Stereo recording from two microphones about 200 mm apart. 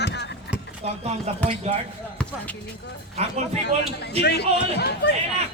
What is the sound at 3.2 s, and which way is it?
Speech, 30° right (ahead or behind).